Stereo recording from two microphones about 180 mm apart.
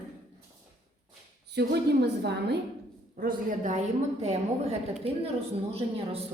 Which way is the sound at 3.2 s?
50° right (ahead or behind).